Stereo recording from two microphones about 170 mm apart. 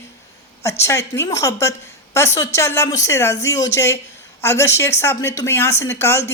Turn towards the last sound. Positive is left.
turn(degrees=15)  # may be behind; listen again after turning